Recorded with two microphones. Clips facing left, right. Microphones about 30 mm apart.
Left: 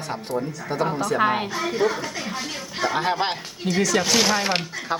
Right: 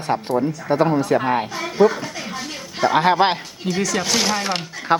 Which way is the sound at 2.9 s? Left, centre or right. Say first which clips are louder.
Right 8 dB; right.